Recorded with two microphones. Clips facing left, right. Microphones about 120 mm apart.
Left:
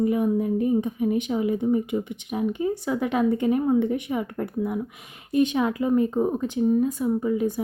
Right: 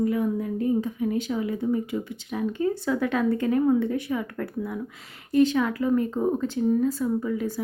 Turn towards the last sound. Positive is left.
turn(degrees=20)  # may be behind; listen again after turning